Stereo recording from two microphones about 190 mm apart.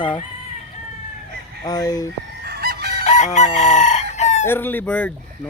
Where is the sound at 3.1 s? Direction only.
35° left (ahead or behind).